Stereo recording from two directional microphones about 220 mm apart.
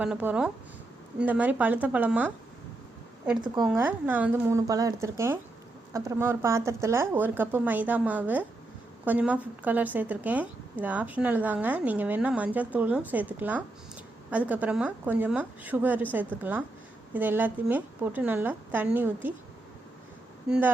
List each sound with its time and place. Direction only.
0.0 s speech: 5° right (ahead or behind)
3.4 s speech: 20° right (ahead or behind)
3.7 s speech: 10° right (ahead or behind)